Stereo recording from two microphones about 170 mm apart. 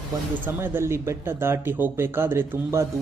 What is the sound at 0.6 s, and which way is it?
Speech, 15° right (ahead or behind).